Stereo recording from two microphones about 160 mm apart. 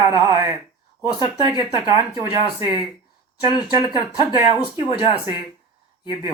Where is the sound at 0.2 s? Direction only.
20° right (ahead or behind).